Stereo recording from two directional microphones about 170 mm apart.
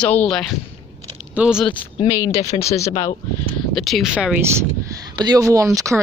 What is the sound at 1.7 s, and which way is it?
Speech, 30° left (ahead or behind).